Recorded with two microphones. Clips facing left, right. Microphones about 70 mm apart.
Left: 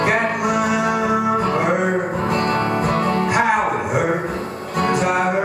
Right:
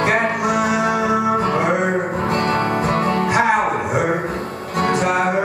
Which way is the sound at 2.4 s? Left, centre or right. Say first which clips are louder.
Right 1 dB; right.